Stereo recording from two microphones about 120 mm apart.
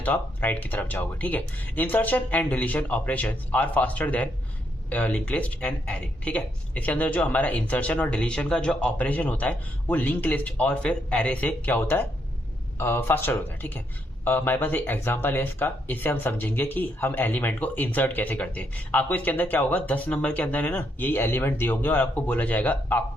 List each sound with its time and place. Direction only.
0.0 s speech: 15° left (ahead or behind)